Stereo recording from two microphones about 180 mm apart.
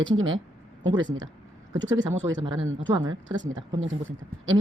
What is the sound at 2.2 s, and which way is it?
Speech, 15° right (ahead or behind).